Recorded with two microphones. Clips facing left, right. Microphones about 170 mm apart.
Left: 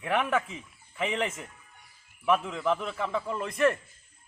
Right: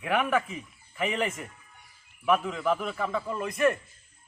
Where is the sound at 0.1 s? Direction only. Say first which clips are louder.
Right 1 dB; 25° left (ahead or behind).